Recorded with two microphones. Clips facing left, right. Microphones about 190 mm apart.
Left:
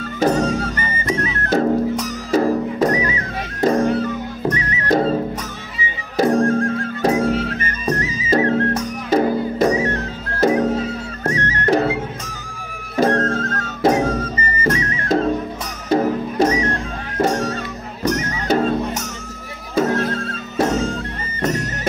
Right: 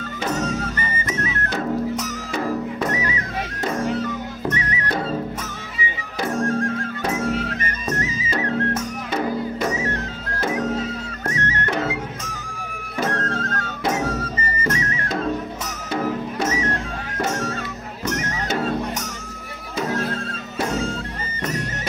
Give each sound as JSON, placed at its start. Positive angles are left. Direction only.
{"t": 0.2, "sound": "music", "side_deg": 35}
{"t": 6.1, "sound": "music", "side_deg": 35}
{"t": 19.7, "sound": "music", "side_deg": 50}